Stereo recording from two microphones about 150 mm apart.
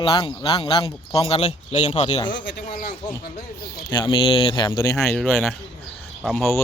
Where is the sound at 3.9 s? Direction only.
30° left (ahead or behind).